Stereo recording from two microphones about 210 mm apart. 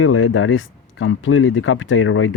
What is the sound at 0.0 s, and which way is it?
Speech, 75° left (ahead or behind).